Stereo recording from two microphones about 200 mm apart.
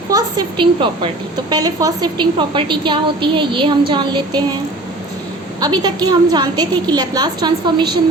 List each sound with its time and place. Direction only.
0.1 s a woman's voice: 20° right (ahead or behind)
5.5 s a woman's voice: 20° right (ahead or behind)